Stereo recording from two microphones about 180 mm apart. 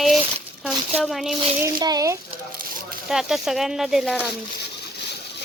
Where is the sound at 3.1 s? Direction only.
Centre (ahead or behind).